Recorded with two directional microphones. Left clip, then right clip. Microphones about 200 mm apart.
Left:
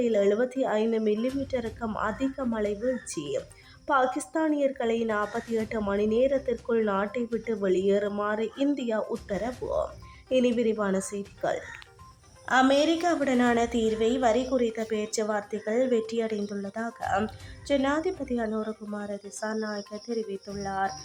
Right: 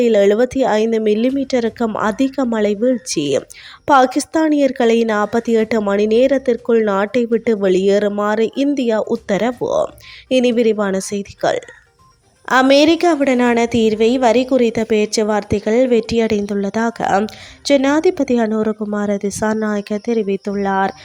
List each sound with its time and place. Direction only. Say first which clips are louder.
0.0 s a woman's voice: right 12 dB; 35° right (ahead or behind)